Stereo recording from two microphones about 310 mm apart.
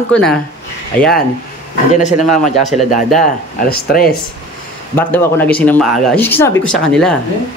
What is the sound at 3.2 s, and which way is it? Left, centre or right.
Speech, left.